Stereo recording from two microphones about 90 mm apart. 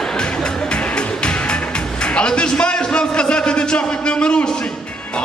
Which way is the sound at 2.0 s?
10° left (ahead or behind).